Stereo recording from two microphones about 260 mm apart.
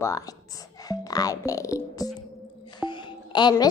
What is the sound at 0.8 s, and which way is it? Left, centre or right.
Music, centre.